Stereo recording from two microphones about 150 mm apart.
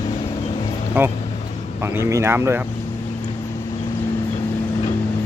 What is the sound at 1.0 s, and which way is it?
Vehicle, 15° right (ahead or behind).